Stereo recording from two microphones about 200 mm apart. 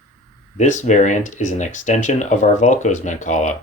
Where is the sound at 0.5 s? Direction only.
40° left (ahead or behind).